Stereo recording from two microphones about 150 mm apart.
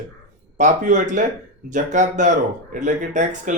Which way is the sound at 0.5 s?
55° right (ahead or behind).